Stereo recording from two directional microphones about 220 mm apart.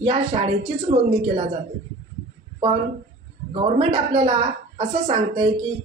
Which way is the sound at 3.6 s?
25° right (ahead or behind).